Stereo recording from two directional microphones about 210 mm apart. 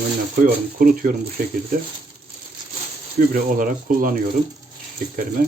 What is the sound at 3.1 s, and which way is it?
Speech, 40° right (ahead or behind).